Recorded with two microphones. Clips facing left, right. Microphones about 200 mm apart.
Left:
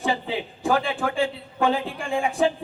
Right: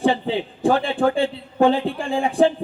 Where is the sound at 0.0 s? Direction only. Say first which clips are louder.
Right 6 dB; 30° right (ahead or behind).